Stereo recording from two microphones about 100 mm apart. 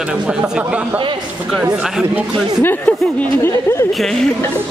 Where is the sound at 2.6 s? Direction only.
20° left (ahead or behind).